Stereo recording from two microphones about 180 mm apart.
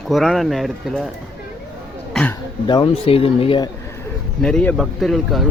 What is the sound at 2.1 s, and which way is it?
Throat clearing, 5° left (ahead or behind).